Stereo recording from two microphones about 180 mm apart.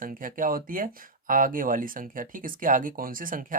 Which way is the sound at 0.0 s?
50° right (ahead or behind).